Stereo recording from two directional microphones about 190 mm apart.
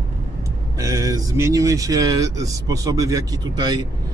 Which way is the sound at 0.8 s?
15° right (ahead or behind).